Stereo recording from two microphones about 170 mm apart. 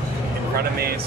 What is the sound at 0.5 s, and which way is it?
Speech, 65° right (ahead or behind).